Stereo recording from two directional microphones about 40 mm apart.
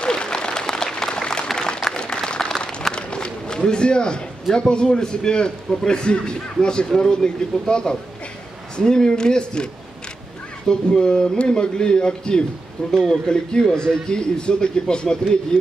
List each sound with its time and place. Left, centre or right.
0.0 s applause: left
1.6 s a sound: left
2.0 s applause: centre
2.9 s a sound: left
4.6 s a man's voice: left
10.7 s a man's voice: left
12.9 s speech: centre
13.3 s a man's voice: centre